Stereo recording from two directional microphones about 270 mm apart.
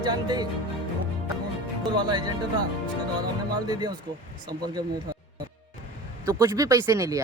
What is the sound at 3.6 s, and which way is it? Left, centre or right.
Speech, centre.